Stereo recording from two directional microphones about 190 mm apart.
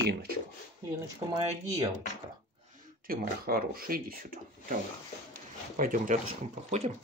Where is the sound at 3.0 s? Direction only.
50° right (ahead or behind).